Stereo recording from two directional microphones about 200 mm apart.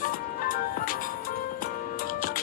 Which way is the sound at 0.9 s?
45° left (ahead or behind).